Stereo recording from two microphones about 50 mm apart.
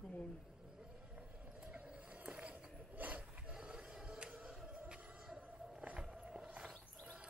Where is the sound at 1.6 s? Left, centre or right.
Right.